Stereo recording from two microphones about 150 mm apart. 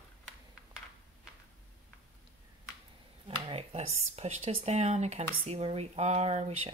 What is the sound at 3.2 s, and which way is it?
Speech, 40° right (ahead or behind).